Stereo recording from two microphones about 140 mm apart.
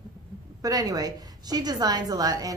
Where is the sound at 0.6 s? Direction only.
25° right (ahead or behind).